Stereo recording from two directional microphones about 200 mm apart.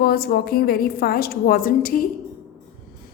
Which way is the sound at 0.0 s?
50° left (ahead or behind).